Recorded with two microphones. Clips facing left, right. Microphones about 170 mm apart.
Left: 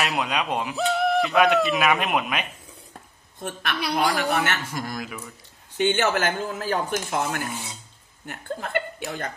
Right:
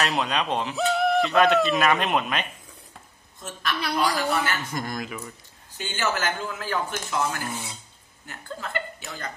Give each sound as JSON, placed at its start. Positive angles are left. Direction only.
{"t": 0.0, "sound": "speech", "side_deg": 10}
{"t": 0.7, "sound": "speech", "side_deg": 0}
{"t": 3.3, "sound": "speech", "side_deg": 55}
{"t": 4.7, "sound": "speech", "side_deg": 5}
{"t": 5.8, "sound": "speech", "side_deg": 65}